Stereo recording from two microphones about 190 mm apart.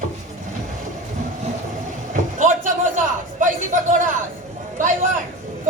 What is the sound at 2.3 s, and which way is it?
A woman's voice, 40° right (ahead or behind).